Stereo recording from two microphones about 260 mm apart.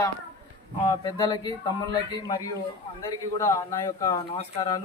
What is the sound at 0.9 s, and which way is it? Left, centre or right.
A man's voice, centre.